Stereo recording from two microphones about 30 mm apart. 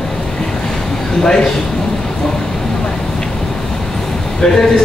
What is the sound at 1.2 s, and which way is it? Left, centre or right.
Speech, left.